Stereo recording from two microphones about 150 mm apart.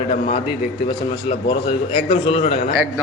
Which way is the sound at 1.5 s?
35° left (ahead or behind).